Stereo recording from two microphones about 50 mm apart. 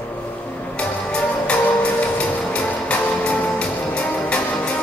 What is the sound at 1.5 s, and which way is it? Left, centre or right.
Music, left.